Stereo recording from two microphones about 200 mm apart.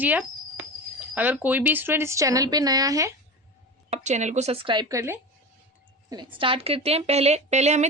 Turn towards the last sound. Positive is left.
turn(degrees=-35)  # may be behind; listen again after turning